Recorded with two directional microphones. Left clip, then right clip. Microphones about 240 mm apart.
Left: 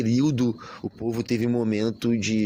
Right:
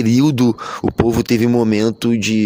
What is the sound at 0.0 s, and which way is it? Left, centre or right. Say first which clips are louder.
Speech: right 9 dB; right.